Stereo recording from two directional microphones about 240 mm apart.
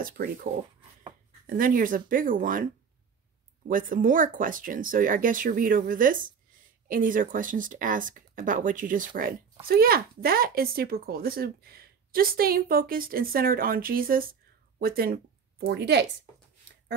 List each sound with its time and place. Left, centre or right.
0.0 s speech: right
1.5 s a woman's voice: right